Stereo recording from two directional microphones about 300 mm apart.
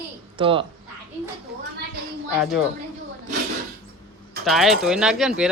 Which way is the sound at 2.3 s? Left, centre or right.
Centre.